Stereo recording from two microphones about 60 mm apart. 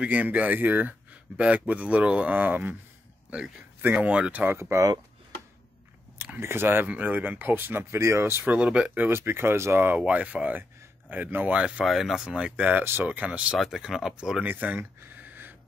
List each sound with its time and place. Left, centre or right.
0.0 s speech: right
3.9 s speech: right
4.5 s speech: right
6.4 s speech: right
6.9 s speech: right
8.0 s speech: right
8.5 s speech: centre
8.9 s speech: right
9.9 s speech: right
11.5 s speech: centre
11.8 s speech: centre; by 13.6 s right
13.7 s speech: centre
14.4 s speech: right